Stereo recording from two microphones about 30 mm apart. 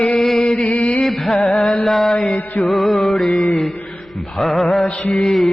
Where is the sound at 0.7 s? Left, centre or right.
Left.